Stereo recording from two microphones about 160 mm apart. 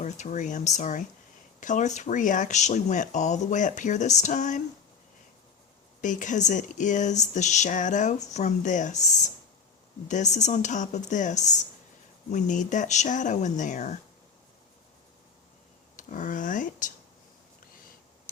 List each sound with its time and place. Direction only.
0.0 s speech: 50° left (ahead or behind)
6.0 s speech: 50° left (ahead or behind)
16.0 s speech: 50° left (ahead or behind)